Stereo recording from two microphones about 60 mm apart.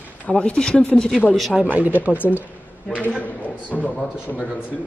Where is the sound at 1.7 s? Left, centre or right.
Right.